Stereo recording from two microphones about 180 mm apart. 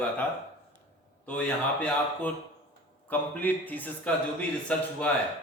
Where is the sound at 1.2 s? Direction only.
5° left (ahead or behind).